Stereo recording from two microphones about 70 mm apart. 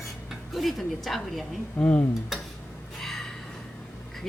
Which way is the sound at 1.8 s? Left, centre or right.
Centre.